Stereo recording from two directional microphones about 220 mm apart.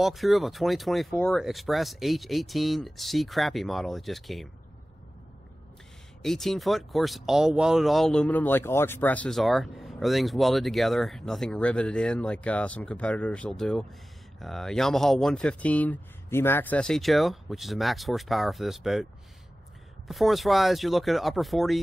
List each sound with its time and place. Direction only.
0.0 s speech: centre (ahead or behind)
6.2 s speech: centre (ahead or behind)
20.1 s speech: centre (ahead or behind)